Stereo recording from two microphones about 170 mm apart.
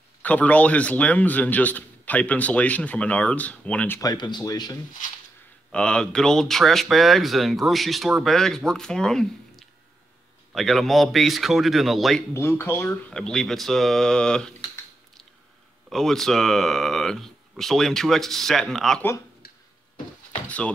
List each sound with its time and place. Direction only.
0.2 s a man's voice: 10° left (ahead or behind)
4.0 s speech: 25° left (ahead or behind)
5.7 s speech: 5° left (ahead or behind)
12.4 s speech: 15° left (ahead or behind)
15.9 s speech: centre (ahead or behind)
20.4 s speech: 10° left (ahead or behind)